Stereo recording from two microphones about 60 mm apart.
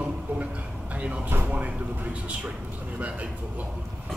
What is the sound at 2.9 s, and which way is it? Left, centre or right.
Speech, right.